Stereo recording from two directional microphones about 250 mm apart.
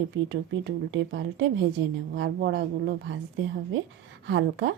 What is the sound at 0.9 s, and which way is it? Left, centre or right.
A woman's voice, right.